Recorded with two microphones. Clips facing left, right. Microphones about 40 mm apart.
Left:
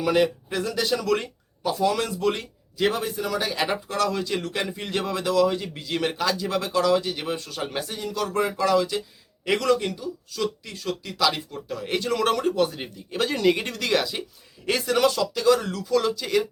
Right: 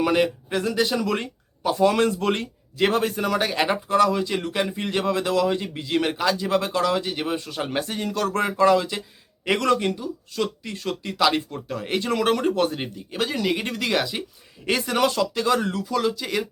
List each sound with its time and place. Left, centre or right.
0.1 s speech: right
1.7 s speech: right
3.4 s speech: right
7.8 s speech: right
11.9 s speech: right
12.5 s speech: right
13.1 s speech: centre
13.7 s speech: centre
15.0 s speech: right
15.9 s speech: centre